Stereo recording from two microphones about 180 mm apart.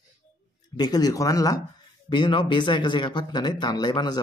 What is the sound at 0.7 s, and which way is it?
Speech, 20° left (ahead or behind).